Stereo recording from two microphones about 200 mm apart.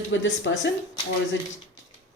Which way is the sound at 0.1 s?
70° left (ahead or behind).